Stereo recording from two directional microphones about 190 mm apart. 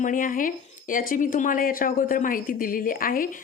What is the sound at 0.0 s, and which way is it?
A woman's voice, 45° left (ahead or behind).